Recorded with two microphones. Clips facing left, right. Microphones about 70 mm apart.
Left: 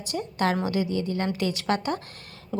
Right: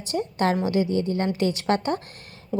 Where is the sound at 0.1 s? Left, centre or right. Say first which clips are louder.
Right 3 dB; right.